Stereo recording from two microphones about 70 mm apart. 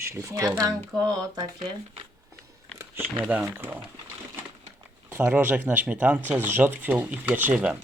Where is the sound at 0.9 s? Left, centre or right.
Right.